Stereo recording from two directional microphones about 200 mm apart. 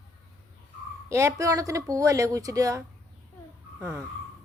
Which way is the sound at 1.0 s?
15° right (ahead or behind).